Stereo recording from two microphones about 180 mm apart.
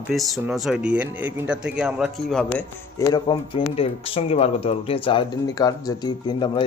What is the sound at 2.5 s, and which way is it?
Speech, 20° left (ahead or behind).